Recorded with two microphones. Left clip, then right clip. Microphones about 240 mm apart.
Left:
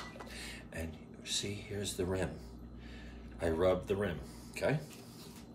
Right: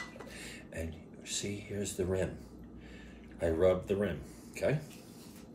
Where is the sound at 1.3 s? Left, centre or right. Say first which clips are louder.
Left 1 dB; centre.